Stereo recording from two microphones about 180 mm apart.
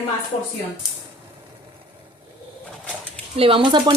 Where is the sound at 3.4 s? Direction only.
30° right (ahead or behind).